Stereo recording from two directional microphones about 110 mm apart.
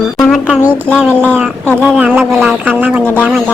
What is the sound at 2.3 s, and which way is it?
Speech, centre (ahead or behind).